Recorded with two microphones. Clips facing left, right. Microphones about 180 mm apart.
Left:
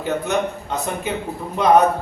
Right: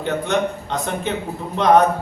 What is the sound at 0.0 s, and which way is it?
A man's voice, 5° left (ahead or behind).